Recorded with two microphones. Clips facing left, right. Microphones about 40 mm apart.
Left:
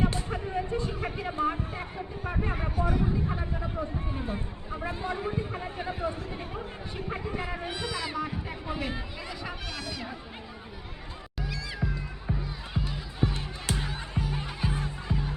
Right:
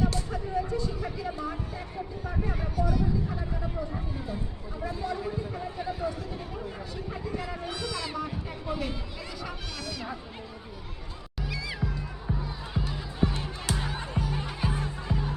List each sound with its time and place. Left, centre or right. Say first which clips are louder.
0.0 s a sound: even; left
1.3 s speech: left 5 dB; left
3.8 s run: left 1 dB; left; by 9.0 s centre
9.4 s music: even; centre
11.3 s music: right 1 dB; centre
14.2 s music: even; centre